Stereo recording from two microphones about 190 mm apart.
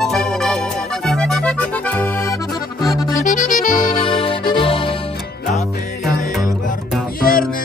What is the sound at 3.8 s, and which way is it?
Music, 25° left (ahead or behind).